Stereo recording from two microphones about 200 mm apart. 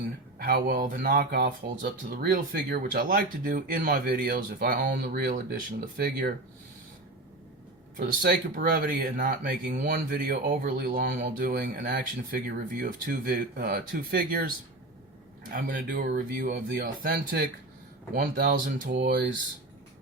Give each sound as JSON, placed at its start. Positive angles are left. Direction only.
{"t": 0.3, "sound": "speech", "side_deg": -45}
{"t": 7.9, "sound": "speech", "side_deg": -45}
{"t": 15.4, "sound": "speech", "side_deg": -45}